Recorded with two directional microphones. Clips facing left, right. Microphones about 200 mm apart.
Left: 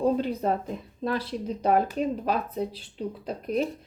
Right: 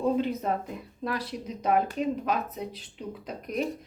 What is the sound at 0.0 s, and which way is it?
Speech, 35° left (ahead or behind).